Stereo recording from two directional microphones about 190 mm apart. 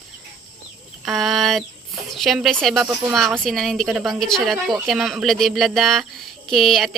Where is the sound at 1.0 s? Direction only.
Centre (ahead or behind).